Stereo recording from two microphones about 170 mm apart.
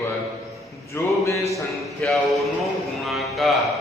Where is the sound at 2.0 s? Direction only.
10° left (ahead or behind).